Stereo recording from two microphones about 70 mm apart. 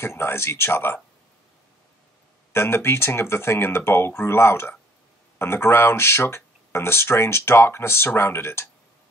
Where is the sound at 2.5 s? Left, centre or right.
Left.